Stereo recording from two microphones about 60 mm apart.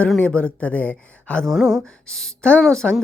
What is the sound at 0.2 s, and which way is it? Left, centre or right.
A woman's voice, left.